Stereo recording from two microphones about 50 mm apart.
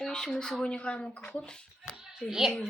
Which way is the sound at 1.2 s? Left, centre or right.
Centre.